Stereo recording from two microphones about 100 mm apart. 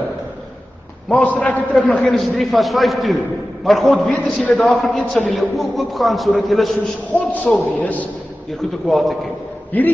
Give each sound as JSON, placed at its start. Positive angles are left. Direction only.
{"t": 1.0, "sound": "a man's voice", "side_deg": 15}
{"t": 4.1, "sound": "a man's voice", "side_deg": 15}
{"t": 4.6, "sound": "a man's voice", "side_deg": 0}
{"t": 7.1, "sound": "a man's voice", "side_deg": 15}
{"t": 8.5, "sound": "a man's voice", "side_deg": 0}
{"t": 9.7, "sound": "a man's voice", "side_deg": 15}